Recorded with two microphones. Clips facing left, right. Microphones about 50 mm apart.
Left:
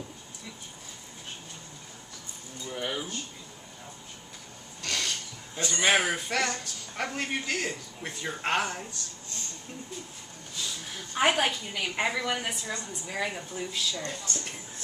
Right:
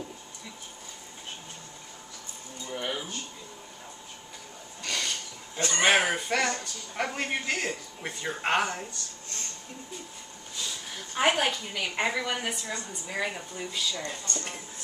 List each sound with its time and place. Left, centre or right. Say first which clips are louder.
2.7 s a sound: even; centre
4.8 s filing: even; centre
5.9 s speech: right 1 dB; centre
6.2 s speech: right 2 dB; centre
10.6 s a woman's voice: even; centre